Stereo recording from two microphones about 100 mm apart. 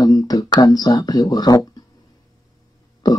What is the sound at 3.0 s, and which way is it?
Burping, 40° left (ahead or behind).